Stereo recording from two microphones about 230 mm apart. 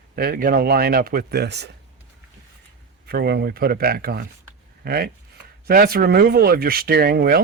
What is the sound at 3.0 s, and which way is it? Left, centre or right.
Speech, right.